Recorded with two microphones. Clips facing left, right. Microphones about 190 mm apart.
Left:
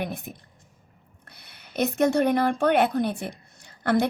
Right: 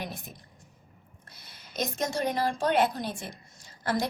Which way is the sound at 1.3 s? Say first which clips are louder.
Left 3 dB; 60° left (ahead or behind).